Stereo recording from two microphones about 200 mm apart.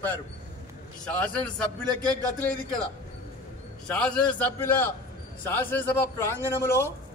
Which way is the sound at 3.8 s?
5° left (ahead or behind).